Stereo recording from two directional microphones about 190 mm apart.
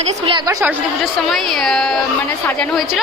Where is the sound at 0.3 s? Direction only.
25° right (ahead or behind).